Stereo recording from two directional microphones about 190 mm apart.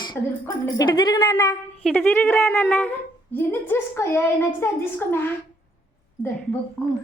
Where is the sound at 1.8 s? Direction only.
10° left (ahead or behind).